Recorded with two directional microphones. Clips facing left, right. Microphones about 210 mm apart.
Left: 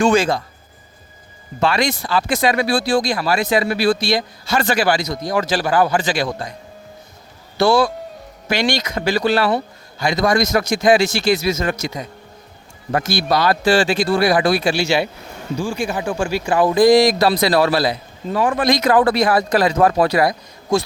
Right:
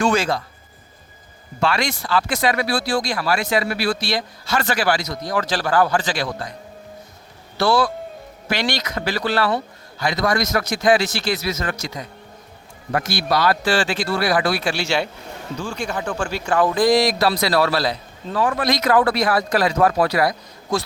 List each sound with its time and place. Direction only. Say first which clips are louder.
0.0 s speech: left 4 dB; 20° left (ahead or behind)
1.6 s speech: left 3 dB; 20° left (ahead or behind)
7.6 s speech: left 3 dB; 15° left (ahead or behind)